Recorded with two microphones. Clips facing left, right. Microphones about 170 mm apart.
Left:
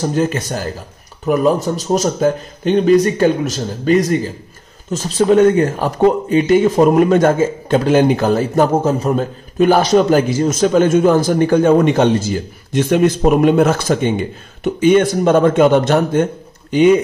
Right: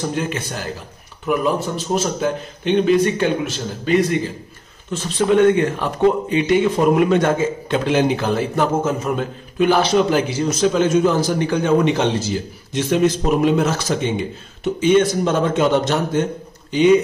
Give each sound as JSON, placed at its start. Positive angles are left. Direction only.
{"t": 0.0, "sound": "a man's voice", "side_deg": 40}